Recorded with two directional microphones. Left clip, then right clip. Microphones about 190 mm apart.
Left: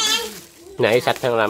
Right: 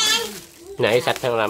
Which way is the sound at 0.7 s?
25° left (ahead or behind).